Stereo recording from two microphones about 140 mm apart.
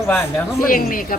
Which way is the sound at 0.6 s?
85° left.